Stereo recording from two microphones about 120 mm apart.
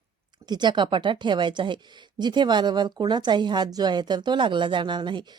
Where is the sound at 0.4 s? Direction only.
35° right (ahead or behind).